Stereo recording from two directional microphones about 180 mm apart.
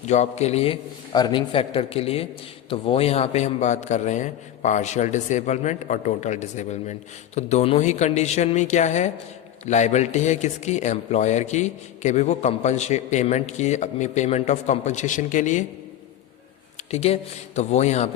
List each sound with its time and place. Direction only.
0.1 s speech: 40° left (ahead or behind)
16.9 s speech: 35° left (ahead or behind)